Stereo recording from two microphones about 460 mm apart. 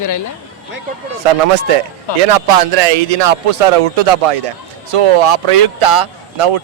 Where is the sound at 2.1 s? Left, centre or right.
Left.